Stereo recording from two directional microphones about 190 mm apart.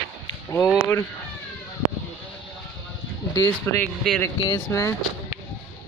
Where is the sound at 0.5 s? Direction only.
15° left (ahead or behind).